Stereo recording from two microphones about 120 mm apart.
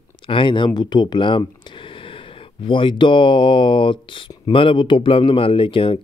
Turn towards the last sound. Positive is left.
turn(degrees=50)  # may be behind; listen again after turning